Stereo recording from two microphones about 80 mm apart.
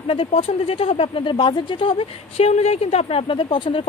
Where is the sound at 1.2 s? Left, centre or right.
Left.